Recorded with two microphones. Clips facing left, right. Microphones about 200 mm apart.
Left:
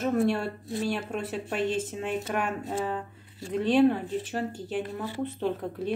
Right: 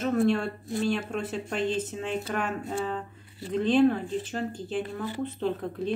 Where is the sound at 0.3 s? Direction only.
10° left (ahead or behind).